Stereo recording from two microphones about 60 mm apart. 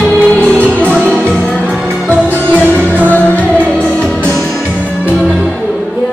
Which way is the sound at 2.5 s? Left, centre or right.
Centre.